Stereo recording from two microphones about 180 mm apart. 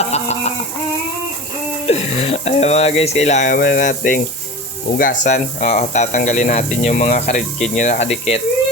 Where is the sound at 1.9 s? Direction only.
35° left (ahead or behind).